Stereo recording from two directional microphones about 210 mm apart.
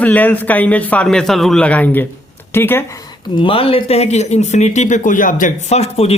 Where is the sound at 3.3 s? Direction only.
25° left (ahead or behind).